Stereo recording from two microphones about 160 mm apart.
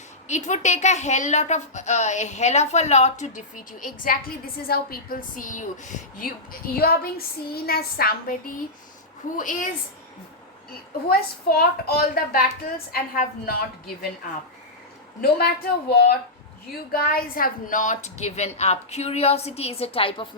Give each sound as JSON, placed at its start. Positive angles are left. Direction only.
{"t": 0.3, "sound": "a woman's voice", "side_deg": 45}
{"t": 9.4, "sound": "a woman's voice", "side_deg": 55}
{"t": 10.7, "sound": "a woman's voice", "side_deg": 70}
{"t": 15.2, "sound": "a woman's voice", "side_deg": 75}